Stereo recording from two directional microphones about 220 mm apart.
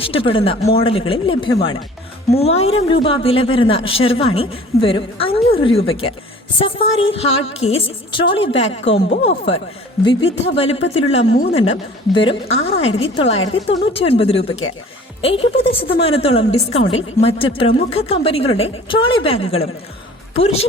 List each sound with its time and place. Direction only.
0.0 s speech: 25° left (ahead or behind)